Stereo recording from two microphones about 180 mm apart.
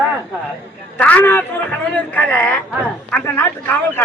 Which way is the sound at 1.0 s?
10° left (ahead or behind).